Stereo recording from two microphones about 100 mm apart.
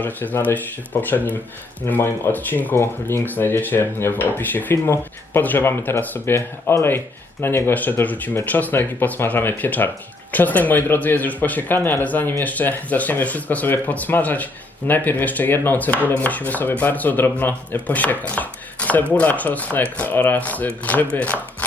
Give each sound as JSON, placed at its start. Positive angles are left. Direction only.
{"t": 0.0, "sound": "speech", "side_deg": 20}